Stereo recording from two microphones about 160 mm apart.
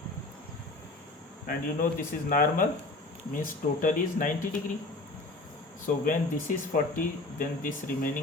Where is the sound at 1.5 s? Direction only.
60° left (ahead or behind).